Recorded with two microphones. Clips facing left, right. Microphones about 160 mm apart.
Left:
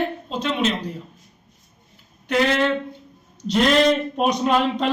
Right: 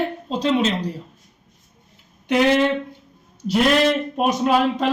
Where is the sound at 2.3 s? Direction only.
15° right (ahead or behind).